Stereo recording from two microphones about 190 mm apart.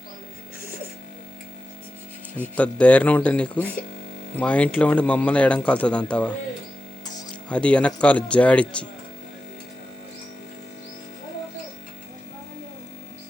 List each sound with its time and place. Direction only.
2.6 s a man's voice: 5° left (ahead or behind)
7.5 s a man's voice: 5° left (ahead or behind)